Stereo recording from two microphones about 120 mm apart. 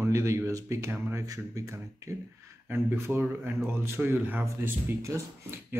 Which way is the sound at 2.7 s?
20° right (ahead or behind).